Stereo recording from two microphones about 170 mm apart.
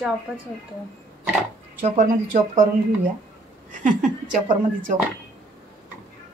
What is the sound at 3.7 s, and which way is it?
Speech, 45° right (ahead or behind).